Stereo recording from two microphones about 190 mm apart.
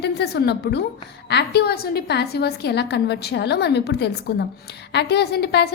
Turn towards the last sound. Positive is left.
turn(degrees=60)  # may be behind; listen again after turning